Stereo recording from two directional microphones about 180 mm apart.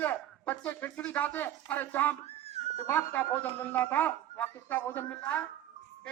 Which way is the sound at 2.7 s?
10° left (ahead or behind).